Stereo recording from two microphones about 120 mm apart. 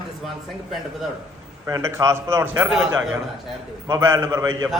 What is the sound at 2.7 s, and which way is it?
Speech, 5° right (ahead or behind).